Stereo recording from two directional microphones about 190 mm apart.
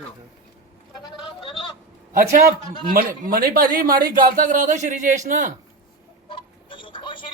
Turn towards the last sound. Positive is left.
turn(degrees=25)  # may be behind; listen again after turning